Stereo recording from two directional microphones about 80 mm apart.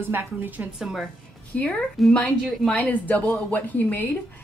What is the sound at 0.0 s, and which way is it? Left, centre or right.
Speech, right.